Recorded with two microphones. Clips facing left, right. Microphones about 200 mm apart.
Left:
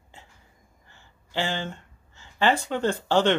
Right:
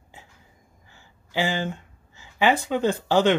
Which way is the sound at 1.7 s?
10° right (ahead or behind).